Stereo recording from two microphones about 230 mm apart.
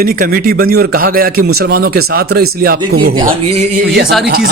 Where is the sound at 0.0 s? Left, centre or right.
Right.